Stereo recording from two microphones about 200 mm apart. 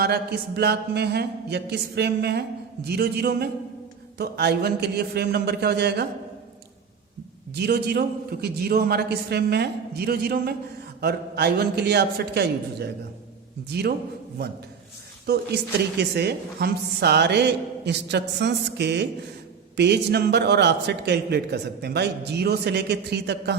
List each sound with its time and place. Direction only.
0.0 s a man's voice: 55° right (ahead or behind)
7.5 s a man's voice: 55° right (ahead or behind)
15.3 s speech: 55° right (ahead or behind)